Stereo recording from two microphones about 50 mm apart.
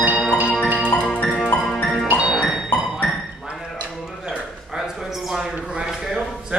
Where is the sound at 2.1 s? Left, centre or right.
Centre.